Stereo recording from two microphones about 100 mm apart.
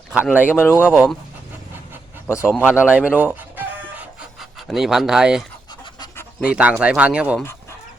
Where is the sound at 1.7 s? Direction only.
20° right (ahead or behind).